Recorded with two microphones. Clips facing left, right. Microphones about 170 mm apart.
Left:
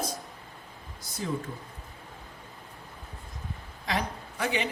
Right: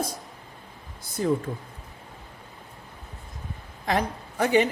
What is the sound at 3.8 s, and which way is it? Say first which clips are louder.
Speech: right 5 dB; 50° right (ahead or behind).